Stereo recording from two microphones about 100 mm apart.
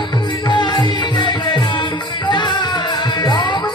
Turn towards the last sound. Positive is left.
turn(degrees=50)  # may be behind; listen again after turning